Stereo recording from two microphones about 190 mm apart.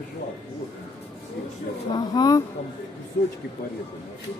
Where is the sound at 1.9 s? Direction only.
20° left (ahead or behind).